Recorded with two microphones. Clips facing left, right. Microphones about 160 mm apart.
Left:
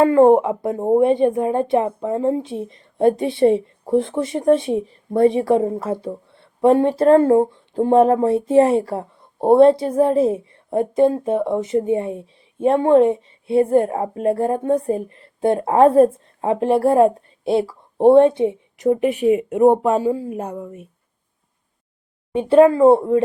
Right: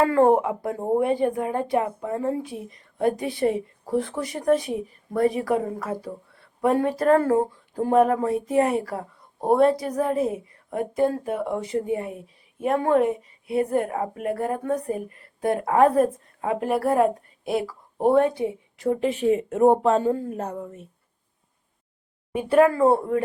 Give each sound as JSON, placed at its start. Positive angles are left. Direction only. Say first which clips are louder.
{"t": 0.0, "sound": "speech", "louder": "left 6 dB", "side_deg": 20}
{"t": 22.3, "sound": "speech", "louder": "left 6 dB", "side_deg": 25}